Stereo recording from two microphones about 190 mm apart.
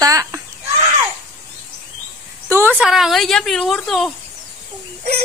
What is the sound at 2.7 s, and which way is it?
A woman's voice, centre (ahead or behind).